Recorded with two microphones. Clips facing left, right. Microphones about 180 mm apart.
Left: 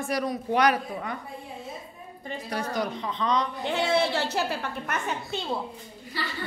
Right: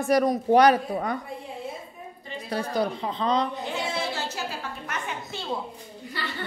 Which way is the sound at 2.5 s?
30° right (ahead or behind).